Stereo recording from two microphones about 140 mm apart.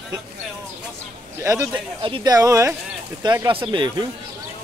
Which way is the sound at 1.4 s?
20° right (ahead or behind).